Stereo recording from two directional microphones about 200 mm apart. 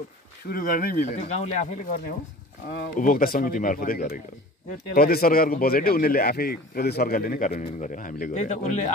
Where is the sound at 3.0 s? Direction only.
45° left (ahead or behind).